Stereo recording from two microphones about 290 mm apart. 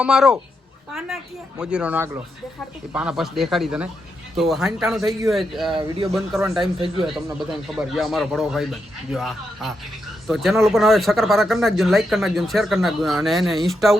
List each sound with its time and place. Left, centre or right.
0.0 s speech: centre
5.7 s speech: centre
6.1 s speech: centre